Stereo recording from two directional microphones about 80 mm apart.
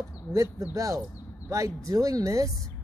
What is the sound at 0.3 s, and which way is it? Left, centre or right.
A woman's voice, right.